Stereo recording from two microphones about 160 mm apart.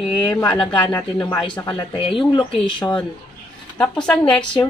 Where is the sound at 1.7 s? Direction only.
30° left (ahead or behind).